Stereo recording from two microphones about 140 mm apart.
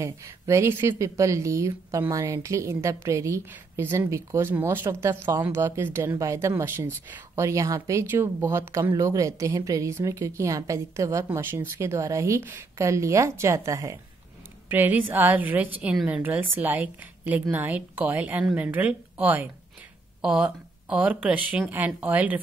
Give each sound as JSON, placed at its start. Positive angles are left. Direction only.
{"t": 0.0, "sound": "a woman's voice", "side_deg": -20}
{"t": 14.7, "sound": "a woman's voice", "side_deg": -15}